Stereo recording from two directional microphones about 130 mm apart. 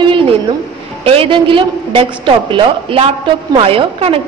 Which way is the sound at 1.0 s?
45° right (ahead or behind).